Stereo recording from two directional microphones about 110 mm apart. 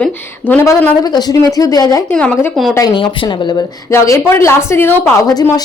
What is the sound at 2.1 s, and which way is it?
Speech, 10° left (ahead or behind).